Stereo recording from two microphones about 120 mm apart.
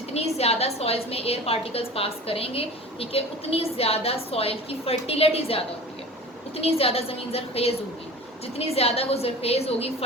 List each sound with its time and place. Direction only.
0.1 s a woman's voice: 60° left (ahead or behind)